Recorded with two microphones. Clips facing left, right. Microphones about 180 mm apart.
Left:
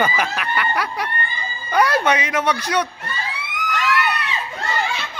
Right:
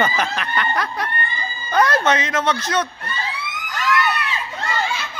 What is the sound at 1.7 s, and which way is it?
Speech, 10° left (ahead or behind).